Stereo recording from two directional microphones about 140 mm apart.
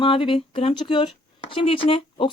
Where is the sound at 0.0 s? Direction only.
35° left (ahead or behind).